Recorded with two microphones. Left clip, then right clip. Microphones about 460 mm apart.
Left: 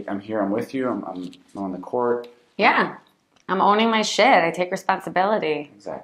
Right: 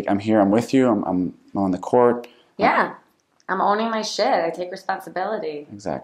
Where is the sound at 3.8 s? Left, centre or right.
Centre.